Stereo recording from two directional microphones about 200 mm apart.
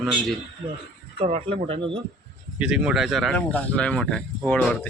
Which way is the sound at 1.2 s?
30° right (ahead or behind).